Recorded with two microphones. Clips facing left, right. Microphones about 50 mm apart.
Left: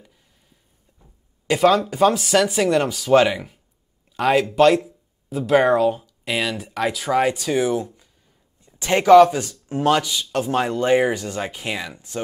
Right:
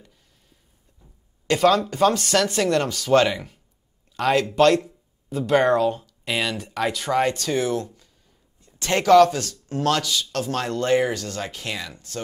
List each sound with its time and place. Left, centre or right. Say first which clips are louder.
0.9 s speech: left 1 dB; centre